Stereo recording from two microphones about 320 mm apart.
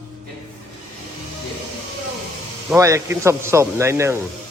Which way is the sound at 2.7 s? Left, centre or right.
Centre.